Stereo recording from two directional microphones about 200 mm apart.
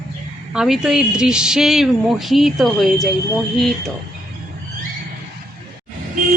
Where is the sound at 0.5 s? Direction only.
5° right (ahead or behind).